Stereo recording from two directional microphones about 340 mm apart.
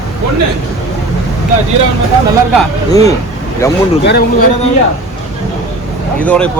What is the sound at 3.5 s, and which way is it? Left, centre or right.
Speech, centre.